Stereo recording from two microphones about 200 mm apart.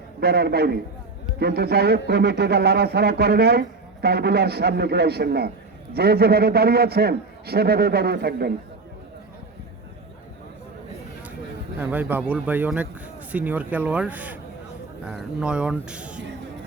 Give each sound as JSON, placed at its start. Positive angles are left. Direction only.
{"t": 0.2, "sound": "a man's voice", "side_deg": -50}
{"t": 11.8, "sound": "speech", "side_deg": -10}